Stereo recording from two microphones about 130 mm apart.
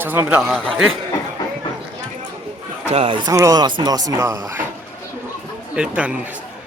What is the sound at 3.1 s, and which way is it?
Speech, 35° right (ahead or behind).